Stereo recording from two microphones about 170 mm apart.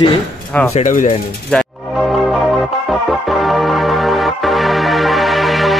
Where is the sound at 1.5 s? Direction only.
5° left (ahead or behind).